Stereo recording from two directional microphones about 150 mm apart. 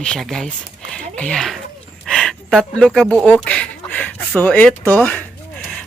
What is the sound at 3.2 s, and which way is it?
Speech, 5° left (ahead or behind).